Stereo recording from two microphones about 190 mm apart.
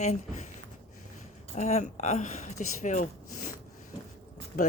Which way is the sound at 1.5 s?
35° left (ahead or behind).